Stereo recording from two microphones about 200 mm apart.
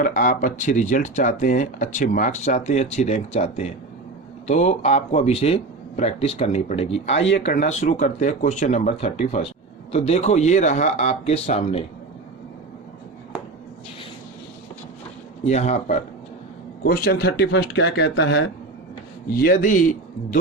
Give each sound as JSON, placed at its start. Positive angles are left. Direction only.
{"t": 0.0, "sound": "speech", "side_deg": 40}
{"t": 7.1, "sound": "speech", "side_deg": 65}
{"t": 7.7, "sound": "speech", "side_deg": 35}
{"t": 15.4, "sound": "speech", "side_deg": 35}
{"t": 16.8, "sound": "speech", "side_deg": 45}
{"t": 19.4, "sound": "speech", "side_deg": 45}